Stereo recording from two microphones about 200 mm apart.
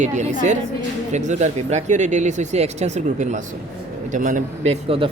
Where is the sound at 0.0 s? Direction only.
35° right (ahead or behind).